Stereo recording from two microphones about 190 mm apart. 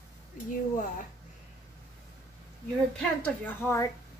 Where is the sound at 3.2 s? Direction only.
10° left (ahead or behind).